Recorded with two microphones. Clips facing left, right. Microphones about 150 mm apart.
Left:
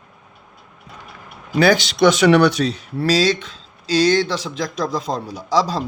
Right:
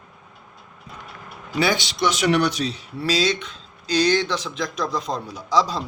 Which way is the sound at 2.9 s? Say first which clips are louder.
Left 5 dB; 40° left (ahead or behind).